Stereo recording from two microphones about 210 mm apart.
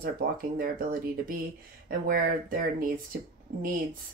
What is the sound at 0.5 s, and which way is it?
Speech, 40° right (ahead or behind).